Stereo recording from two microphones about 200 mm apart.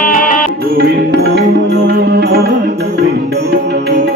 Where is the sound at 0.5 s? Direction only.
50° right (ahead or behind).